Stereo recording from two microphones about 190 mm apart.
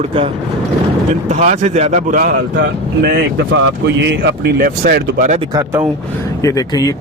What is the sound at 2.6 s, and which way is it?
Speech, 60° right (ahead or behind).